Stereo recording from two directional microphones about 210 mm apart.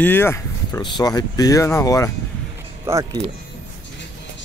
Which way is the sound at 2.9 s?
15° right (ahead or behind).